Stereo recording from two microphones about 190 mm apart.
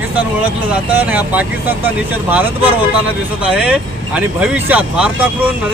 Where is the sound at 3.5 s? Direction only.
5° right (ahead or behind).